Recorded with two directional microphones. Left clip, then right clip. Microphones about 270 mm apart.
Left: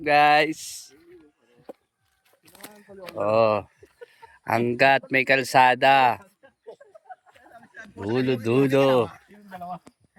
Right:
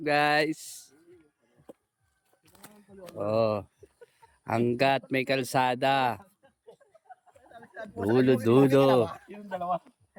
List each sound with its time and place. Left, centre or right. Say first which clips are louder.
0.0 s speech: left 7 dB; centre
3.2 s speech: left 6 dB; centre
3.8 s a sound: left 8 dB; centre
5.1 s speech: left 8 dB; centre
7.4 s wild animals: right 2 dB; centre
8.1 s speech: right 1 dB; centre
9.0 s speech: right 4 dB; right